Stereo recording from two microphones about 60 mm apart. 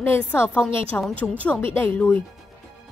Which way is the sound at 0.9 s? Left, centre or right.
Left.